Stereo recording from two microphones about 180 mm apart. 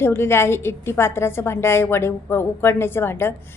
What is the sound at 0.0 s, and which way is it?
A woman's voice, 15° left (ahead or behind).